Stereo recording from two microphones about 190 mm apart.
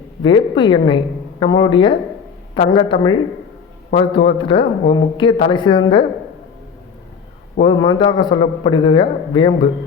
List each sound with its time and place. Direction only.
0.2 s a man's voice: 25° left (ahead or behind)
7.6 s a man's voice: 20° left (ahead or behind)